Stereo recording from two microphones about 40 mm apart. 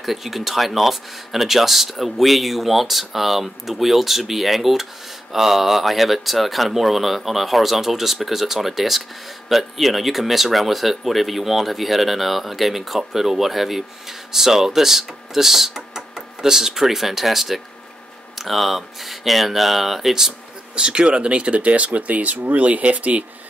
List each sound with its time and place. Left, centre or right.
0.0 s speech: centre
20.7 s speech: right